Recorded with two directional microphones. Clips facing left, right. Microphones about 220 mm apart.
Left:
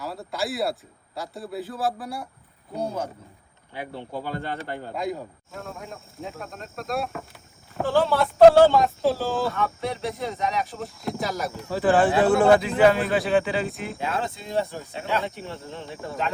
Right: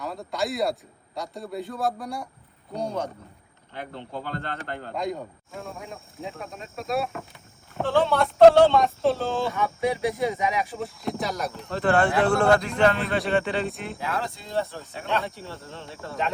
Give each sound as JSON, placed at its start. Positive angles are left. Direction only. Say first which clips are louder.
{"t": 0.0, "sound": "a man's voice", "louder": "right 1 dB", "side_deg": 0}
{"t": 9.5, "sound": "speech", "louder": "right 2 dB", "side_deg": -15}
{"t": 10.8, "sound": "a man's voice", "louder": "even", "side_deg": 0}
{"t": 14.0, "sound": "speech", "louder": "left 2 dB", "side_deg": 25}